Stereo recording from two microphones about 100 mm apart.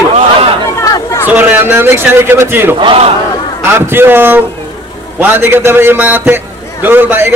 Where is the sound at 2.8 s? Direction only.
70° right (ahead or behind).